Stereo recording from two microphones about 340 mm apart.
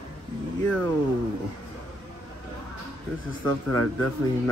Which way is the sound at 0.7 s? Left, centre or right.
Centre.